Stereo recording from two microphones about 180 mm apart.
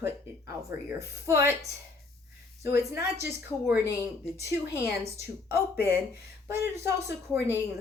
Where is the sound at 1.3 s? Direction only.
15° right (ahead or behind).